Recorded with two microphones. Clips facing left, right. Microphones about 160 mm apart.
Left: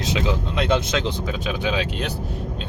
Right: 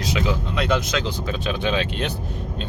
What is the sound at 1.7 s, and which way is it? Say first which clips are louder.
Speech: right 1 dB; 10° left (ahead or behind).